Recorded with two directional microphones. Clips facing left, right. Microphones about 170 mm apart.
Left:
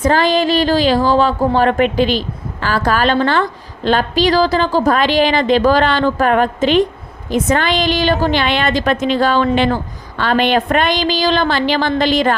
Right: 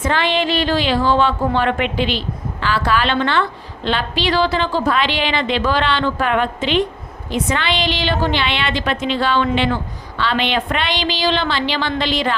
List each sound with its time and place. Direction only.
0.0 s a woman's voice: 40° left (ahead or behind)